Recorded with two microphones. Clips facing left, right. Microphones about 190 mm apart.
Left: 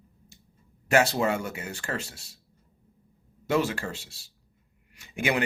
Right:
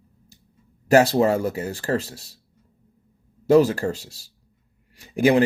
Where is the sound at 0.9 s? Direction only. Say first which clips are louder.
Right 7 dB; 35° right (ahead or behind).